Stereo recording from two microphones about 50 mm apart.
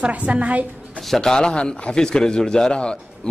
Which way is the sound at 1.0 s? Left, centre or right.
Centre.